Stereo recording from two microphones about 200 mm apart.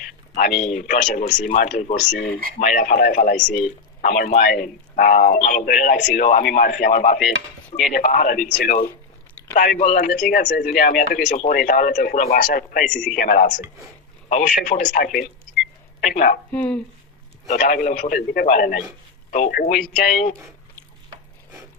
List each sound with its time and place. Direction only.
0.3 s a man's voice: 40° left (ahead or behind)
8.4 s speech: 60° left (ahead or behind)
9.6 s a man's voice: 40° left (ahead or behind)
16.5 s speech: 5° left (ahead or behind)
17.5 s a man's voice: 40° left (ahead or behind)